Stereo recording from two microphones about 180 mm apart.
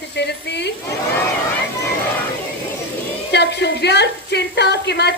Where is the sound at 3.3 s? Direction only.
70° left (ahead or behind).